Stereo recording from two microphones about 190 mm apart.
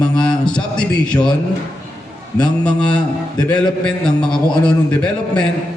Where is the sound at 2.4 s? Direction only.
5° left (ahead or behind).